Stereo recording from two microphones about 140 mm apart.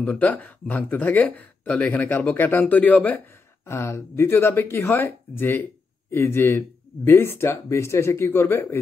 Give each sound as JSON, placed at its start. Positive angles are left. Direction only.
{"t": 0.0, "sound": "speech", "side_deg": 10}